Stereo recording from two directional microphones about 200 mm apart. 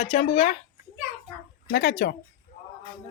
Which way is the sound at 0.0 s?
40° left (ahead or behind).